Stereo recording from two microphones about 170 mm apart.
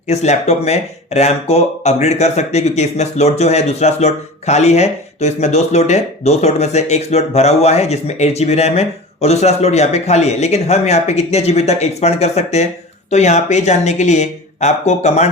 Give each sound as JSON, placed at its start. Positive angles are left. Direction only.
{"t": 0.1, "sound": "speech", "side_deg": 40}